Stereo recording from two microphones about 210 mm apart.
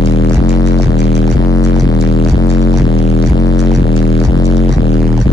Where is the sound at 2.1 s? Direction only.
25° left (ahead or behind).